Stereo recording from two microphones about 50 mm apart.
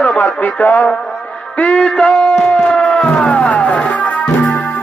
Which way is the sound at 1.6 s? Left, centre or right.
Left.